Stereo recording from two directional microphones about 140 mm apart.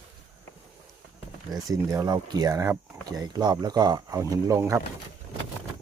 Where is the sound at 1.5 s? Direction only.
25° right (ahead or behind).